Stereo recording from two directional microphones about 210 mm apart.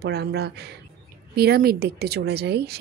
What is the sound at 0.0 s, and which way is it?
Speech, 50° right (ahead or behind).